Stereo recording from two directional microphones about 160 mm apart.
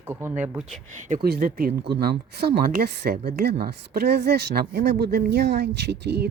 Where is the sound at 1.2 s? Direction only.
70° right (ahead or behind).